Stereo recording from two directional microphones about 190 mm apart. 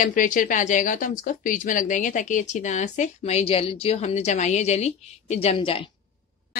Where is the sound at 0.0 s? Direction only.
45° left (ahead or behind); by 5.9 s 30° left (ahead or behind).